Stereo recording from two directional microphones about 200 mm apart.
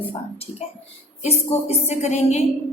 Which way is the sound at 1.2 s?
30° left (ahead or behind).